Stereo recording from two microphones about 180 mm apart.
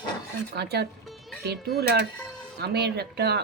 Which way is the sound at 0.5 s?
65° right (ahead or behind).